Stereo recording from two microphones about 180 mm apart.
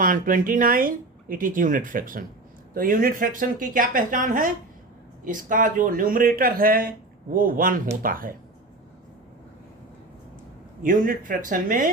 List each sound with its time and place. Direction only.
0.0 s speech: 50° right (ahead or behind)
10.8 s speech: 50° right (ahead or behind)